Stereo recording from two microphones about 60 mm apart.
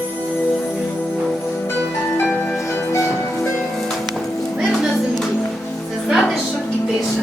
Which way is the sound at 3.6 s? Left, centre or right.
Centre.